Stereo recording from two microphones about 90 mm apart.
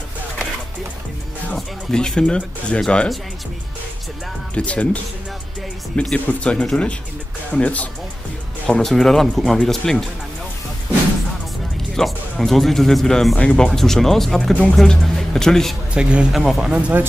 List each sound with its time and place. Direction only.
1.5 s speech: 5° left (ahead or behind)
4.6 s speech: 15° left (ahead or behind)
5.9 s speech: 15° left (ahead or behind)
8.6 s speech: 5° left (ahead or behind)
11.9 s speech: 5° left (ahead or behind)
15.9 s speech: 10° right (ahead or behind)